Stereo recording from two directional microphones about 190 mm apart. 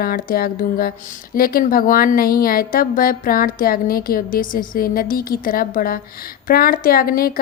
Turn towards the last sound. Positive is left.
turn(degrees=50)  # may be behind; listen again after turning